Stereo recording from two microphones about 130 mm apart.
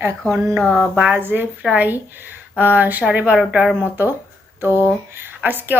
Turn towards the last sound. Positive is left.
turn(degrees=-15)  # may be behind; listen again after turning